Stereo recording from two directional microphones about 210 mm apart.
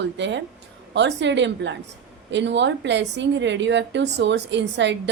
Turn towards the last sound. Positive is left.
turn(degrees=-55)  # may be behind; listen again after turning